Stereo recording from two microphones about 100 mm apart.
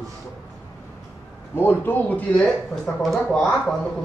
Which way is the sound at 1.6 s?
20° left (ahead or behind).